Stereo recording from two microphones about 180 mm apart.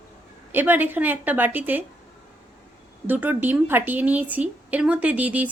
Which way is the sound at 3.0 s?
10° right (ahead or behind).